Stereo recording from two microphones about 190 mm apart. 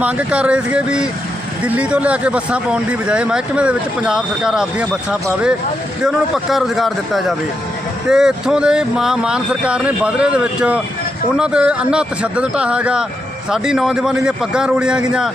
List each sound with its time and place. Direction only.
0.0 s speech: 5° right (ahead or behind)